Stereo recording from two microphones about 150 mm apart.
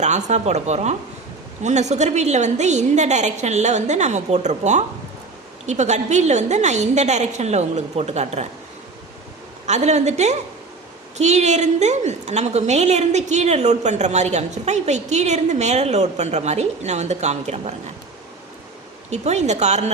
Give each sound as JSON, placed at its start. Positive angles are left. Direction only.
{"t": 0.0, "sound": "a woman's voice", "side_deg": -50}
{"t": 9.6, "sound": "a woman's voice", "side_deg": -50}
{"t": 19.1, "sound": "a woman's voice", "side_deg": -50}